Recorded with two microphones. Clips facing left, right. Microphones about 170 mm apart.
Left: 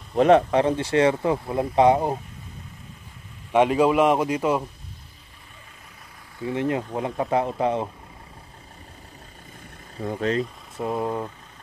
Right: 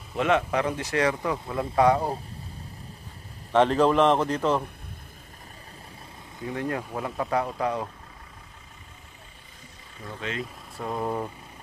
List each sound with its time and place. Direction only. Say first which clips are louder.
0.2 s speech: left 7 dB; 35° left (ahead or behind)
3.5 s a man's voice: left 2 dB; 10° left (ahead or behind)
6.4 s speech: left 5 dB; 20° left (ahead or behind)
9.9 s speech: left 10 dB; 40° left (ahead or behind)
10.8 s a man's voice: left 3 dB; 5° left (ahead or behind)